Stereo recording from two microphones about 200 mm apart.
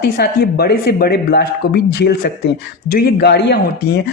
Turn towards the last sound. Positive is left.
turn(degrees=55)  # may be behind; listen again after turning